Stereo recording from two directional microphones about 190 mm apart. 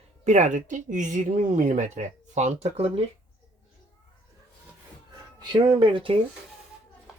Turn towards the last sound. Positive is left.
turn(degrees=-25)  # may be behind; listen again after turning